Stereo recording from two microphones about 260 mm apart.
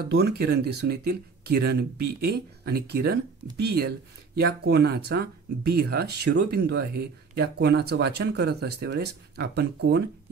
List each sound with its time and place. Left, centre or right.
0.0 s speech: right